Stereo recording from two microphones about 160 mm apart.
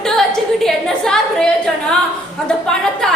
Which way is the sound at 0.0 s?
5° left (ahead or behind).